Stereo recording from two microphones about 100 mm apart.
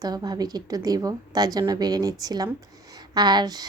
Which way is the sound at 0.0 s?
40° right (ahead or behind).